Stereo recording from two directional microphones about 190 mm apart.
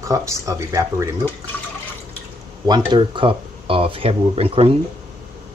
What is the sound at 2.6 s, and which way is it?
Speech, 20° right (ahead or behind).